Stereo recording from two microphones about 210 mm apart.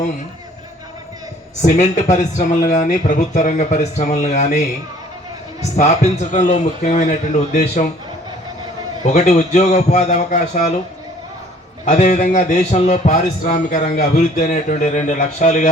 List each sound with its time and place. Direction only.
1.6 s speech: 35° left (ahead or behind)
5.7 s speech: 35° left (ahead or behind)
9.0 s speech: 35° left (ahead or behind)
11.9 s speech: 35° left (ahead or behind)